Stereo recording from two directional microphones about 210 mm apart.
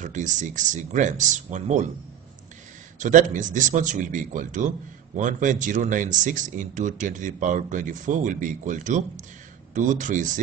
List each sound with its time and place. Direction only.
0.0 s a man's voice: 35° right (ahead or behind)
3.0 s a man's voice: 35° right (ahead or behind)